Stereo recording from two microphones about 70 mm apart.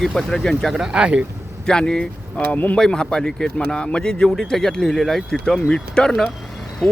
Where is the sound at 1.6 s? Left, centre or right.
Centre.